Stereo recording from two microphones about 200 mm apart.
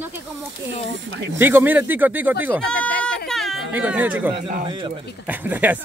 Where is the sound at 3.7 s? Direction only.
10° right (ahead or behind).